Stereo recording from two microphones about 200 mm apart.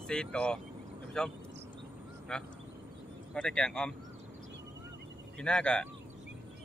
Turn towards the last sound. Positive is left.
turn(degrees=5)  # may be behind; listen again after turning